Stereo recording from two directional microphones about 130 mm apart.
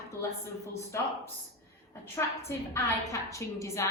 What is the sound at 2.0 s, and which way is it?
A woman's voice, 20° left (ahead or behind).